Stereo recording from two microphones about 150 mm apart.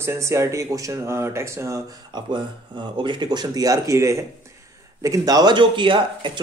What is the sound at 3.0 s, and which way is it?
Speech, 30° right (ahead or behind).